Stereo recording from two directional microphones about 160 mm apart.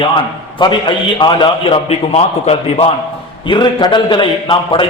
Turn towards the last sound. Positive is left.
turn(degrees=30)  # may be behind; listen again after turning